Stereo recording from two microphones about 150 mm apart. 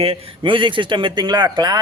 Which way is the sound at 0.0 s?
35° right (ahead or behind).